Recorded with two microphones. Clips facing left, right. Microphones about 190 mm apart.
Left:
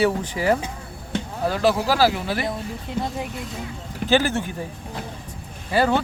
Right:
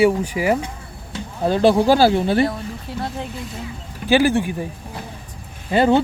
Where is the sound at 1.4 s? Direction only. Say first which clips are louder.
Right 6 dB; 25° right (ahead or behind).